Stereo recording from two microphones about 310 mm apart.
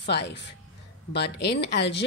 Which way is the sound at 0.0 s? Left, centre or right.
Left.